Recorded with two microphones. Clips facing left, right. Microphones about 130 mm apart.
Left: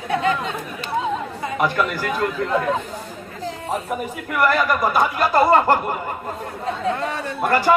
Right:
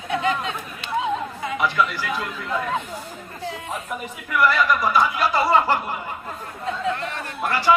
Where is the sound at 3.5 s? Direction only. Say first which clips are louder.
Left 5 dB; 40° left (ahead or behind).